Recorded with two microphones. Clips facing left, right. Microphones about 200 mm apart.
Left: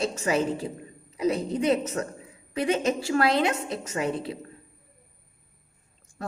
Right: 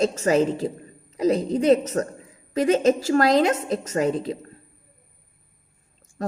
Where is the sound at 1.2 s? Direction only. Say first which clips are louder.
Right 4 dB; 35° right (ahead or behind).